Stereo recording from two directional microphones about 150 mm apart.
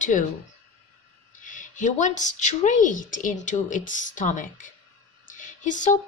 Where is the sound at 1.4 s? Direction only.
60° left (ahead or behind).